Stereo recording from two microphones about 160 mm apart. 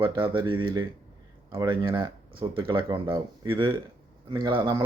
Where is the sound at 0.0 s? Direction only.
30° right (ahead or behind).